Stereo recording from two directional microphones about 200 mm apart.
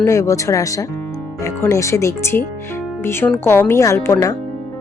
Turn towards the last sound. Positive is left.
turn(degrees=15)  # may be behind; listen again after turning